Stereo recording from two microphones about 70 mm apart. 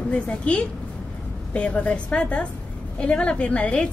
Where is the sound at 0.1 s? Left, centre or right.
Centre.